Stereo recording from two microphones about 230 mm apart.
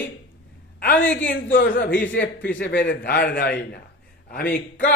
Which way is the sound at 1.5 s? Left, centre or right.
Left.